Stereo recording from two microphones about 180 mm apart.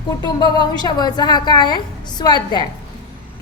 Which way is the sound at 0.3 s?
25° left (ahead or behind).